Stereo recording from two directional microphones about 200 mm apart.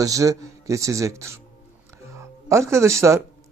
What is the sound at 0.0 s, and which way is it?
Speech, 15° right (ahead or behind).